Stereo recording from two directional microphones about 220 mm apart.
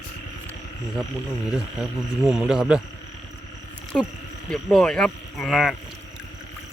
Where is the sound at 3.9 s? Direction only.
5° left (ahead or behind).